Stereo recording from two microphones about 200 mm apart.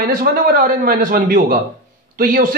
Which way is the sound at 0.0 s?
45° right (ahead or behind).